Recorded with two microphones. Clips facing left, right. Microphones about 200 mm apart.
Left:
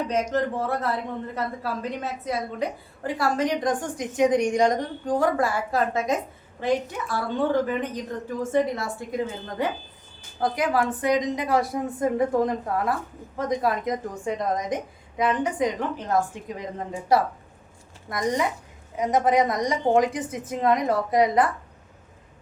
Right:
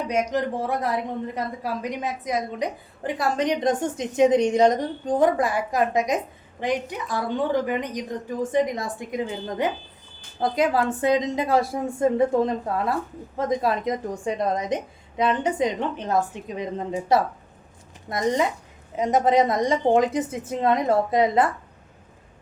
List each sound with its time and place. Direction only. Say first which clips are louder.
0.3 s a woman's voice: even; 15° right (ahead or behind)